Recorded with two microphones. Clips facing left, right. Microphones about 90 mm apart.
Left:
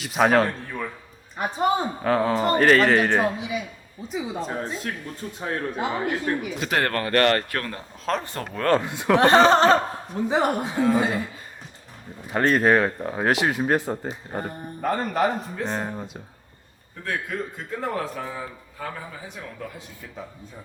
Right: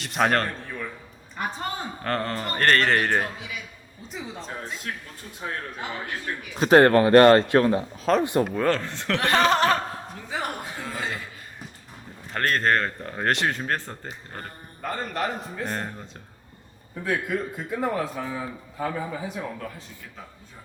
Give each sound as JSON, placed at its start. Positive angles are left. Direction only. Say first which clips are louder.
{"t": 0.0, "sound": "a man's voice", "louder": "left 4 dB", "side_deg": 5}
{"t": 1.4, "sound": "speech", "louder": "left 8 dB", "side_deg": 15}
{"t": 2.0, "sound": "a man's voice", "louder": "left 6 dB", "side_deg": 5}
{"t": 3.3, "sound": "a man's voice", "louder": "left 8 dB", "side_deg": 20}
{"t": 4.1, "sound": "speech", "louder": "left 7 dB", "side_deg": 5}
{"t": 4.5, "sound": "speech", "louder": "left 6 dB", "side_deg": 35}
{"t": 5.5, "sound": "a man's voice", "louder": "left 6 dB", "side_deg": 25}
{"t": 6.6, "sound": "a man's voice", "louder": "right 14 dB", "side_deg": -35}
{"t": 8.7, "sound": "speech", "louder": "left 7 dB", "side_deg": 15}
{"t": 9.2, "sound": "a man's voice", "louder": "left 5 dB", "side_deg": 30}
{"t": 10.6, "sound": "speech", "louder": "left 12 dB", "side_deg": 15}
{"t": 12.3, "sound": "a man's voice", "louder": "left 4 dB", "side_deg": 10}
{"t": 17.0, "sound": "a man's voice", "louder": "right 2 dB", "side_deg": -5}